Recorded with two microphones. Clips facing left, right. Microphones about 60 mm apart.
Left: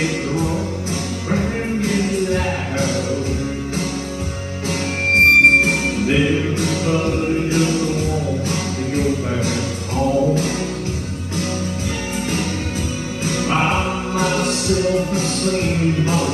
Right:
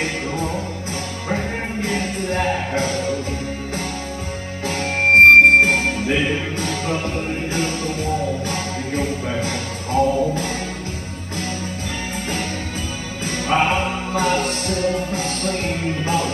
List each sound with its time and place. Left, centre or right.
0.0 s music: right
4.6 s music: right
13.2 s music: right